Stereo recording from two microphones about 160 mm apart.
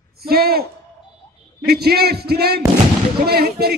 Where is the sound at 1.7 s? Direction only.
80° right.